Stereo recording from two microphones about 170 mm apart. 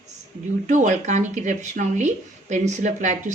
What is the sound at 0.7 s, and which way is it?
Speech, 45° right (ahead or behind).